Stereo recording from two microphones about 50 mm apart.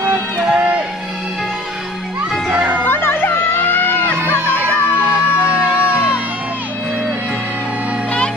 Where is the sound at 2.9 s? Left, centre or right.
Left.